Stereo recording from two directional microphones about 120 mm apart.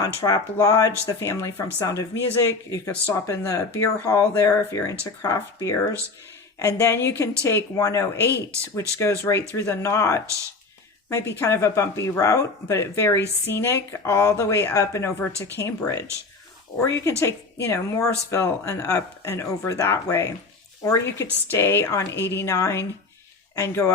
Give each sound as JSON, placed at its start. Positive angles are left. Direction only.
{"t": 0.0, "sound": "speech", "side_deg": 30}
{"t": 9.6, "sound": "speech", "side_deg": 25}